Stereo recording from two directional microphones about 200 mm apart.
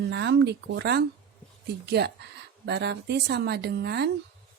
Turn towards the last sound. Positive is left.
turn(degrees=-55)  # may be behind; listen again after turning